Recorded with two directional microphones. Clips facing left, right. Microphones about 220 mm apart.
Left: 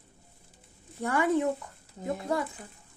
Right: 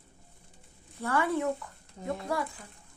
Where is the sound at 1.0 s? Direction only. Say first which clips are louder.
Left 3 dB; 15° left (ahead or behind).